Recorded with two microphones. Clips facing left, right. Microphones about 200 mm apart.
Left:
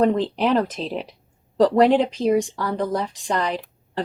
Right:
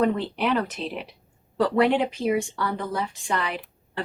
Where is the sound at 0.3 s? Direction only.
35° left (ahead or behind).